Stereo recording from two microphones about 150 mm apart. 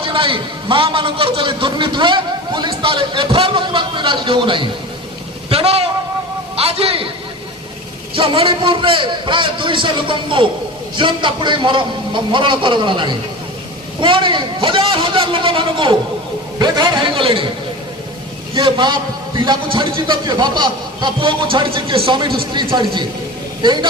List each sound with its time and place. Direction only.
0.0 s a man's voice: 35° right (ahead or behind)
8.1 s a man's voice: 35° right (ahead or behind)
18.5 s a man's voice: 30° right (ahead or behind)